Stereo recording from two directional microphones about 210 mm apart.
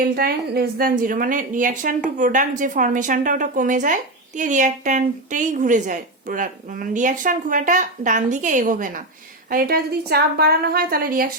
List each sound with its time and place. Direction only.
0.0 s a woman's voice: 45° right (ahead or behind)